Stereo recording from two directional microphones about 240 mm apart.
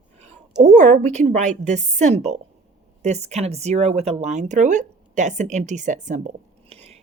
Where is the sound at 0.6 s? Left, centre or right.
Right.